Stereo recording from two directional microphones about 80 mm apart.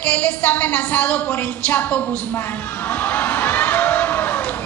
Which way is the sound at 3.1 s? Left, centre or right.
Left.